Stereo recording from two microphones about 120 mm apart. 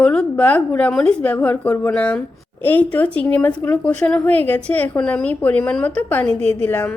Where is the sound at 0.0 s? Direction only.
5° left (ahead or behind).